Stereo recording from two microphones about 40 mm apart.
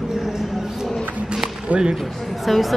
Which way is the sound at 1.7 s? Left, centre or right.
Right.